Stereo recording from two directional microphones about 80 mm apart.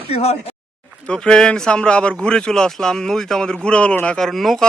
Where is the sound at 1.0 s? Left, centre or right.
Centre.